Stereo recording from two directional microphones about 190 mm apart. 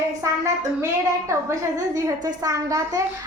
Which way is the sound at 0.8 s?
15° right (ahead or behind).